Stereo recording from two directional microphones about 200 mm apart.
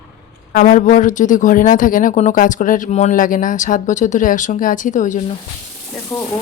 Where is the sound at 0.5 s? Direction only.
40° left (ahead or behind).